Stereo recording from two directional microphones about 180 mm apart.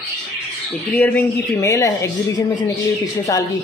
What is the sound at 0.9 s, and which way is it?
A man's voice, 10° left (ahead or behind).